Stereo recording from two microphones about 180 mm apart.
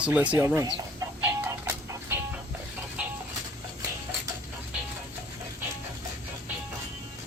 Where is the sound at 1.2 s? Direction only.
10° right (ahead or behind).